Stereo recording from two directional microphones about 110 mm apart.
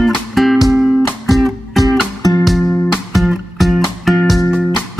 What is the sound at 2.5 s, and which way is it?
Music, centre (ahead or behind).